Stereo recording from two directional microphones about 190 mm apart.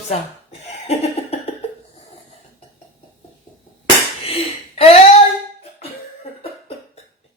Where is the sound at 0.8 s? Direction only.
35° left (ahead or behind).